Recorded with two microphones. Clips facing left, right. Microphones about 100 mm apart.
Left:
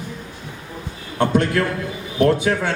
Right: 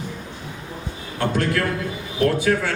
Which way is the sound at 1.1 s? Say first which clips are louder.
Left 4 dB; 20° left (ahead or behind).